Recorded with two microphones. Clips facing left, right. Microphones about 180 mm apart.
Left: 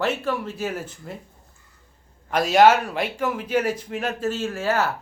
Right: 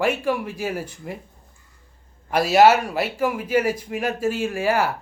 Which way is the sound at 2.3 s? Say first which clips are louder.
Right 1 dB; 10° right (ahead or behind).